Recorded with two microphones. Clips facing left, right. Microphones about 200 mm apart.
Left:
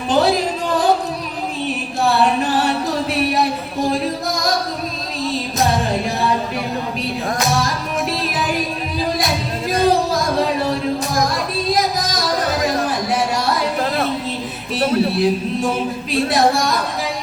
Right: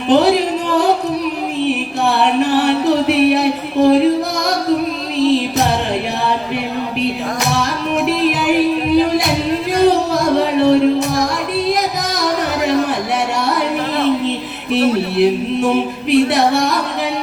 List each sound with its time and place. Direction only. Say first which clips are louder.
0.1 s a sound: right 5 dB; 65° right (ahead or behind)
1.6 s music: right 2 dB; 65° right (ahead or behind)
5.3 s music: right 4 dB; 65° right (ahead or behind)
7.6 s music: right 4 dB; 65° right (ahead or behind)
10.6 s music: right 9 dB; 70° right (ahead or behind)
11.5 s a sound: right 4 dB; 65° right (ahead or behind)
14.3 s music: right 5 dB; 70° right (ahead or behind)
16.0 s singing: right 4 dB; 65° right (ahead or behind)